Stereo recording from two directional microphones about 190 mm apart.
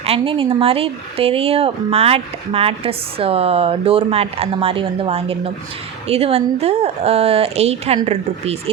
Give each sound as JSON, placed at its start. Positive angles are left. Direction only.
{"t": 0.0, "sound": "speech", "side_deg": -30}